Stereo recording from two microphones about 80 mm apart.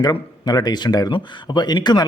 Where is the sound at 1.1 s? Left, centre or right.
Left.